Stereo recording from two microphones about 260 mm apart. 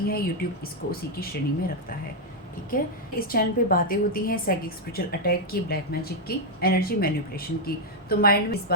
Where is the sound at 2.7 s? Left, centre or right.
Left.